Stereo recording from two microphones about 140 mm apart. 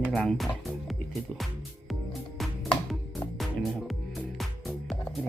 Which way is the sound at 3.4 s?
Centre (ahead or behind).